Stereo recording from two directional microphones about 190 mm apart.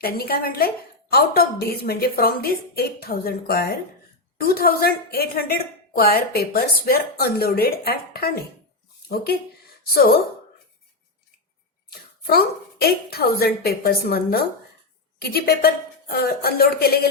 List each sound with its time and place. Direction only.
0.0 s a woman's voice: 50° left (ahead or behind)
11.9 s a woman's voice: 55° left (ahead or behind)